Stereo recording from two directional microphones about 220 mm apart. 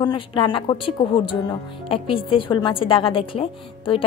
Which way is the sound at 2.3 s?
20° left (ahead or behind).